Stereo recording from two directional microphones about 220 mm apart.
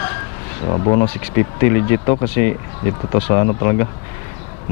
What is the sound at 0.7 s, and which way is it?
Speech, 25° left (ahead or behind).